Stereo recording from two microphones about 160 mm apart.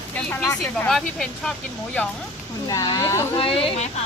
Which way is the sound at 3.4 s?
35° left (ahead or behind).